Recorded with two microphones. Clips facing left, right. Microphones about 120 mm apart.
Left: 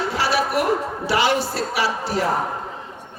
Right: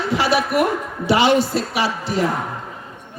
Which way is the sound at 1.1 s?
20° right (ahead or behind).